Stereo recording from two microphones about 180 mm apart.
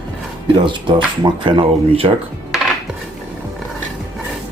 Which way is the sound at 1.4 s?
30° right (ahead or behind).